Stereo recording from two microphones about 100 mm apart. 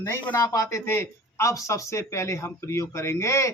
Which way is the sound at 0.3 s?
35° left (ahead or behind).